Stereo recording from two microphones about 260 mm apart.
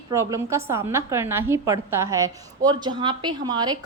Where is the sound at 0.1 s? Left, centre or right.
Centre.